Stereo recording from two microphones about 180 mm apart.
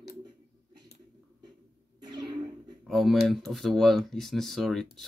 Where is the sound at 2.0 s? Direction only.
25° right (ahead or behind).